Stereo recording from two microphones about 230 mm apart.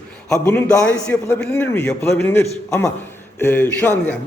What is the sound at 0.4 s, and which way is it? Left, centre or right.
A man's voice, centre.